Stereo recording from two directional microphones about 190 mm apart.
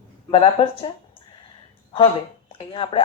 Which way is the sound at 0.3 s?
30° left (ahead or behind).